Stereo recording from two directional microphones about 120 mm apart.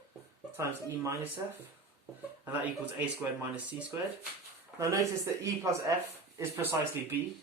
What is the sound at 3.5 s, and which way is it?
Speech, 10° right (ahead or behind).